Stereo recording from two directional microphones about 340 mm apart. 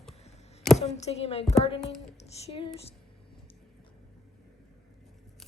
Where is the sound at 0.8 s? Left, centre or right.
Centre.